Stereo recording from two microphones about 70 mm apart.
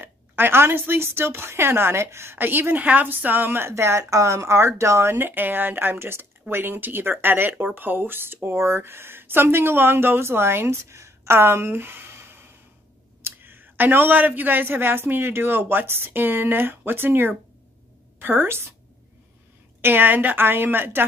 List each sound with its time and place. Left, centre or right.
0.0 s a woman's voice: right
19.8 s a woman's voice: right